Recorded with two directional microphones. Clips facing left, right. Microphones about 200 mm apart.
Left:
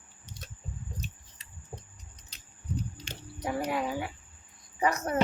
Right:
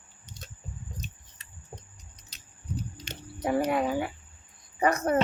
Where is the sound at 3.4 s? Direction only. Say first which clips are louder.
Right 5 dB; 50° right (ahead or behind).